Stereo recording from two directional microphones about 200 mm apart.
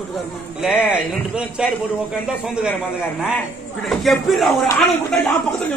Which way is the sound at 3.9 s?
Centre (ahead or behind).